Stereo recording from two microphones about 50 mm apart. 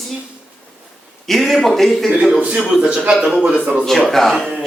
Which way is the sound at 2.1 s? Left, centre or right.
Right.